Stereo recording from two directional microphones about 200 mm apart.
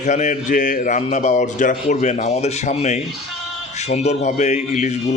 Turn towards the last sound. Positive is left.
turn(degrees=35)  # may be behind; listen again after turning